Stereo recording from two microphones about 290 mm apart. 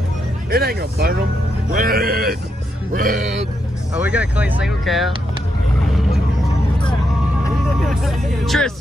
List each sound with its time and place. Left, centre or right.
0.5 s speech: right
3.9 s speech: centre
7.8 s speech: centre